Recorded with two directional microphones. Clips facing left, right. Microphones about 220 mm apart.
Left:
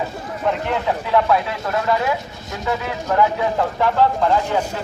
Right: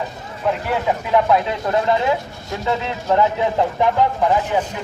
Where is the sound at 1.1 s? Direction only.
25° right (ahead or behind).